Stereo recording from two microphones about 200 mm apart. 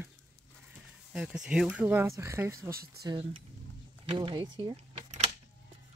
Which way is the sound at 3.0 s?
25° right (ahead or behind).